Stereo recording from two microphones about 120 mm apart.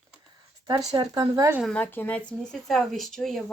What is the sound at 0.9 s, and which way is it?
Speech, 40° right (ahead or behind).